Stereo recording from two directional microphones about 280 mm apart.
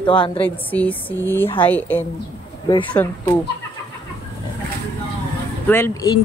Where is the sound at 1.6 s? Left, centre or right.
Centre.